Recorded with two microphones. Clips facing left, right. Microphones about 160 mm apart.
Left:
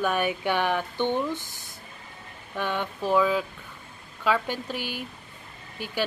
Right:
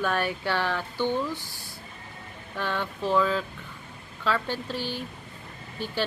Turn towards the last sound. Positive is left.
turn(degrees=15)  # may be behind; listen again after turning